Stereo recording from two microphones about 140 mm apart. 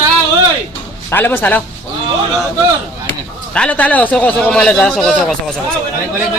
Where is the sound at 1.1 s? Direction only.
15° left (ahead or behind).